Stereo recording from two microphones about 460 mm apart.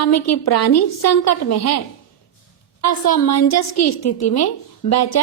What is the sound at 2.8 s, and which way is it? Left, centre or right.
A woman's voice, left.